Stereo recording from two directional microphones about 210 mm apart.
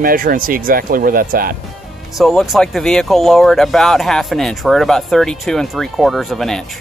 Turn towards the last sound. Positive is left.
turn(degrees=0)  # may be behind; listen again after turning